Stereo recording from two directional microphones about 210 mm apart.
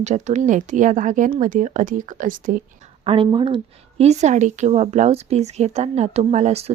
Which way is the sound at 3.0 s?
25° right (ahead or behind).